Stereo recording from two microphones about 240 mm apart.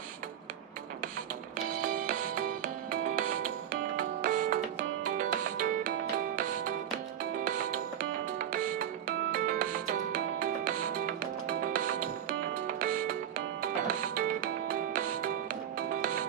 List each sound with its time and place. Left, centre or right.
1.9 s music: right
7.3 s music: right